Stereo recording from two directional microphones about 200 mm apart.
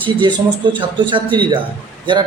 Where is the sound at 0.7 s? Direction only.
25° right (ahead or behind).